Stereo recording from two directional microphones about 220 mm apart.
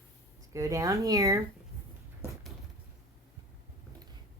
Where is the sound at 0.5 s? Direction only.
15° right (ahead or behind).